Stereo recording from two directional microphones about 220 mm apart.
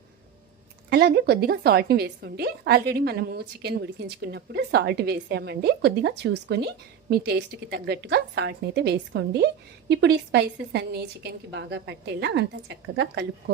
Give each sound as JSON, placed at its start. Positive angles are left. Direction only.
{"t": 0.9, "sound": "a woman's voice", "side_deg": -50}